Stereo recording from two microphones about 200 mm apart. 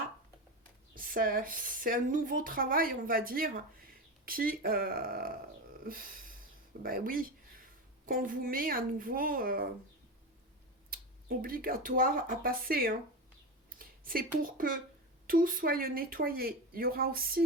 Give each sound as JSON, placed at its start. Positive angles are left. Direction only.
{"t": 0.9, "sound": "speech", "side_deg": -45}
{"t": 5.8, "sound": "a sound", "side_deg": -45}
{"t": 6.8, "sound": "a woman's voice", "side_deg": -45}
{"t": 10.9, "sound": "speech", "side_deg": -45}